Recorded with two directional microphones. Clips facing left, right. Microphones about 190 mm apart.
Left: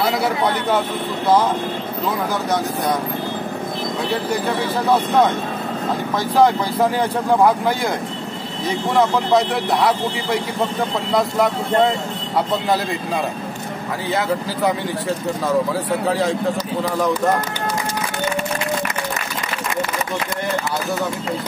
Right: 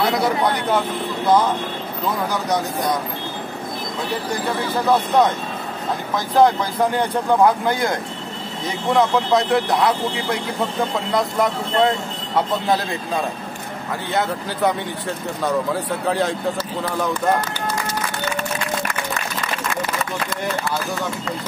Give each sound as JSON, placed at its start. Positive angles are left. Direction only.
{"t": 6.1, "sound": "speech", "side_deg": 0}
{"t": 15.4, "sound": "speech", "side_deg": 0}